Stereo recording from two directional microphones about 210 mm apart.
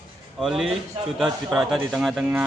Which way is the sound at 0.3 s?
Centre (ahead or behind).